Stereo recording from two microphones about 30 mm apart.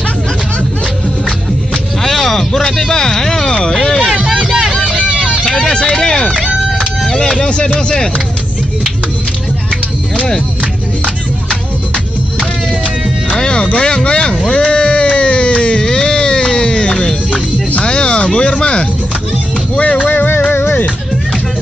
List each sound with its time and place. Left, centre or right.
2.0 s a sound: centre
4.4 s music: centre
5.1 s music: right
5.7 s a sound: left
7.0 s music: centre
7.4 s speech: left
13.4 s a sound: left
17.8 s music: left
19.8 s music: left